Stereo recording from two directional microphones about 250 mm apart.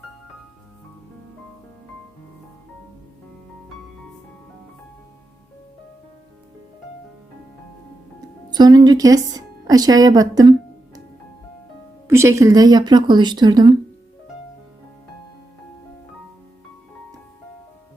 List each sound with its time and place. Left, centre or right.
8.5 s speech: centre
12.0 s speech: centre